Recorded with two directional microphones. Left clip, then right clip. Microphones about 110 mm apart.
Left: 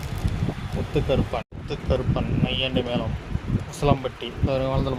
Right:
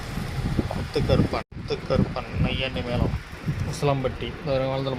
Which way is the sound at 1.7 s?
30° left (ahead or behind).